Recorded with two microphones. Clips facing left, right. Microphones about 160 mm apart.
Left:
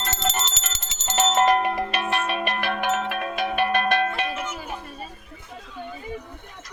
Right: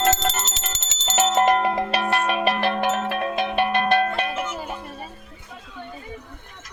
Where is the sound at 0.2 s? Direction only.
45° right (ahead or behind).